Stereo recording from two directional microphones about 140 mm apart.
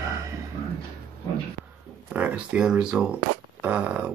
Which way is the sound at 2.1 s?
10° right (ahead or behind).